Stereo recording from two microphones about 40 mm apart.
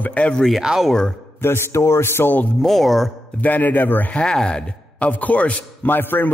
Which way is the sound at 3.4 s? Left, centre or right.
Left.